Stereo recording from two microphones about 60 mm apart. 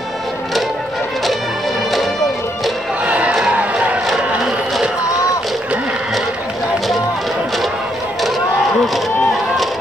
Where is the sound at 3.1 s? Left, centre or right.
Right.